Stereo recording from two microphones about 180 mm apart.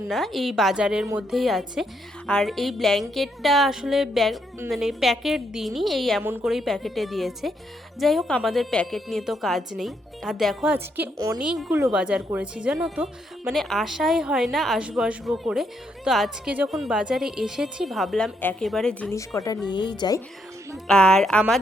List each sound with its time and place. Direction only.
0.1 s speech: centre (ahead or behind)
10.8 s a woman's voice: 10° right (ahead or behind); by 19.1 s 5° left (ahead or behind)
19.1 s a woman's voice: 15° left (ahead or behind)
20.8 s speech: 5° left (ahead or behind)